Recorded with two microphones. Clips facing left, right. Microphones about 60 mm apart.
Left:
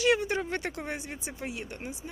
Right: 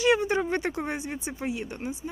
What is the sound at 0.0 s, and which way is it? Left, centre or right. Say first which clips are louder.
Speech: right 3 dB; centre.